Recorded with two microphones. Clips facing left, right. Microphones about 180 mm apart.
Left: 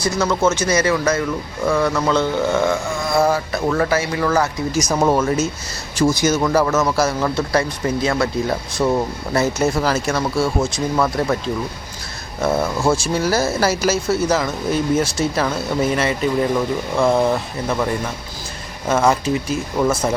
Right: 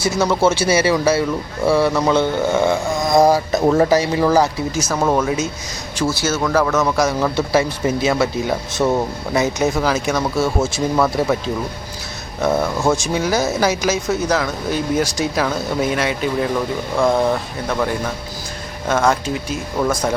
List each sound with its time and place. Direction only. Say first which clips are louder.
0.2 s speech: right 2 dB; 10° right (ahead or behind)
3.0 s a sound: right 4 dB; 40° right (ahead or behind)
3.3 s speech: right 5 dB; 20° right (ahead or behind)
4.9 s speech: left 1 dB; 10° left (ahead or behind)
6.0 s speech: left 3 dB; 15° left (ahead or behind); by 9.0 s 5° right (ahead or behind)
9.3 s speech: even; 15° right (ahead or behind)
9.6 s speech: even; centre (ahead or behind)
12.4 s speech: right 1 dB; centre (ahead or behind)